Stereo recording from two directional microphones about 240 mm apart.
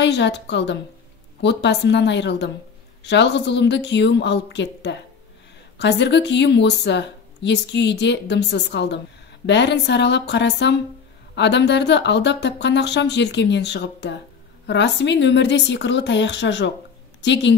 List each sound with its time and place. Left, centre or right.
0.0 s a woman's voice: left